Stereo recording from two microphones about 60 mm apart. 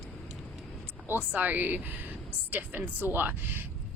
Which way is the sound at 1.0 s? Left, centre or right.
Right.